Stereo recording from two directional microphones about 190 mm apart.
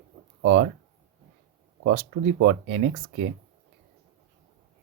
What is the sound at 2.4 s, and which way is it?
Speech, 60° right (ahead or behind).